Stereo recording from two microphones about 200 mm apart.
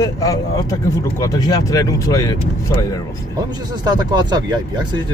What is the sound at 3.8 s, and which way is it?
Speech, 20° right (ahead or behind).